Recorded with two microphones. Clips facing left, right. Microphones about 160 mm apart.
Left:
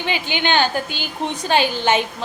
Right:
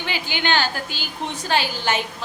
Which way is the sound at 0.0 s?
20° left (ahead or behind).